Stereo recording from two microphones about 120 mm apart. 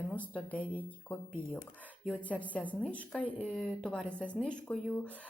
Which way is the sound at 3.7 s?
5° left (ahead or behind).